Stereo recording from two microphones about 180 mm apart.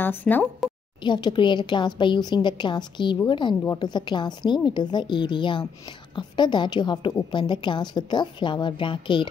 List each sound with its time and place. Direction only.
0.0 s speech: 10° left (ahead or behind)
1.0 s a woman's voice: 25° left (ahead or behind)